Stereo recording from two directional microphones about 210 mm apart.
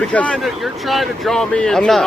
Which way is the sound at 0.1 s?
5° left (ahead or behind).